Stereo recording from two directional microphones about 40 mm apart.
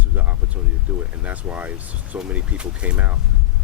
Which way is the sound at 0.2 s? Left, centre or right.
Right.